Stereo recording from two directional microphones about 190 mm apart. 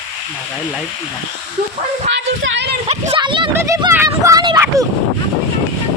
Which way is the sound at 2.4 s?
65° right (ahead or behind).